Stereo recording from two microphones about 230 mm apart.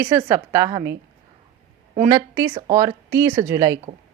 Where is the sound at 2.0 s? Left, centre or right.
Centre.